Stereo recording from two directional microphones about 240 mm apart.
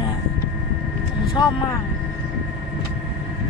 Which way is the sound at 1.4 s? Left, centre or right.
Centre.